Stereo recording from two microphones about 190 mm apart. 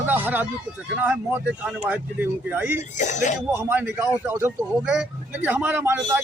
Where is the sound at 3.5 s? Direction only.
10° right (ahead or behind).